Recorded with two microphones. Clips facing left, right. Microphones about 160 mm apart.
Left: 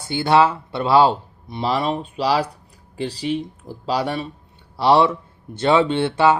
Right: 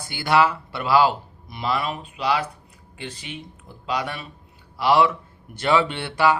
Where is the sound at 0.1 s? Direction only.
25° left (ahead or behind).